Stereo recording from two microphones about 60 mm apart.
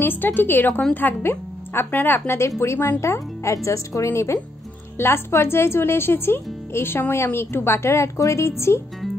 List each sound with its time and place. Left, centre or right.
0.0 s speech: left
4.9 s speech: left